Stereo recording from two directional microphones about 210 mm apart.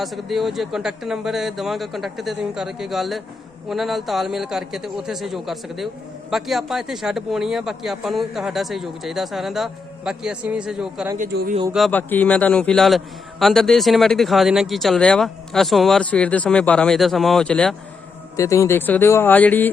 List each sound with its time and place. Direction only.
0.0 s speech: centre (ahead or behind)
11.3 s a man's voice: 50° right (ahead or behind)
11.7 s speech: 5° left (ahead or behind)